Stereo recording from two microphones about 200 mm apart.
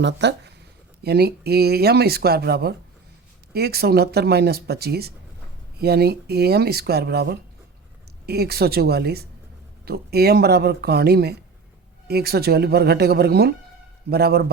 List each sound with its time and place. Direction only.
0.0 s speech: 60° right (ahead or behind)